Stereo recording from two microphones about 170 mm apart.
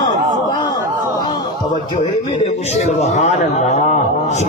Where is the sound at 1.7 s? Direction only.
30° left (ahead or behind).